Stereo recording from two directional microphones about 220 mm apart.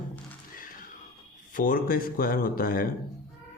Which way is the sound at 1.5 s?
40° left (ahead or behind).